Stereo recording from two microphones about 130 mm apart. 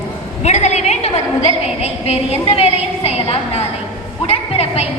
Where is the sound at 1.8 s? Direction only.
55° left (ahead or behind).